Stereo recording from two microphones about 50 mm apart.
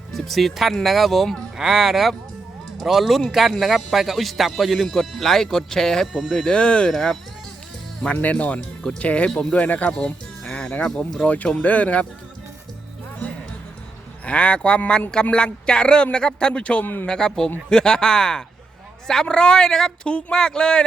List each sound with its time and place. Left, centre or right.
0.1 s speech: centre
1.5 s speech: centre; by 6.9 s left
6.9 s speech: centre
8.2 s speech: left
10.0 s music: centre
11.2 s speech: left
14.3 s speech: left
16.8 s speech: left
17.1 s speech: centre